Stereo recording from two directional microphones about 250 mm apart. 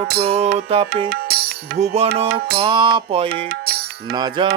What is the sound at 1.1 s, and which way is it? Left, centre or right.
Music, right.